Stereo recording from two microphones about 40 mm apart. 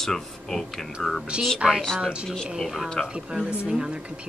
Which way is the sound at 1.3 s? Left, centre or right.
Right.